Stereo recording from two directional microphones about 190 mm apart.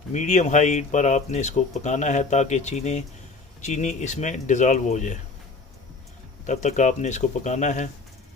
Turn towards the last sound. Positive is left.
turn(degrees=40)  # may be behind; listen again after turning